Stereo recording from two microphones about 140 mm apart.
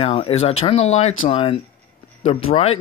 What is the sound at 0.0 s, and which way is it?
Speech, 45° left (ahead or behind).